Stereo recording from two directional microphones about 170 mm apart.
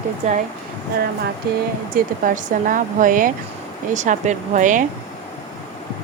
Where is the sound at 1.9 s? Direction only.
50° right (ahead or behind).